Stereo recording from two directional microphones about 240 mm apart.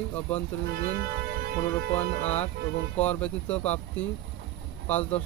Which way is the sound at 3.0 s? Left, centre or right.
Centre.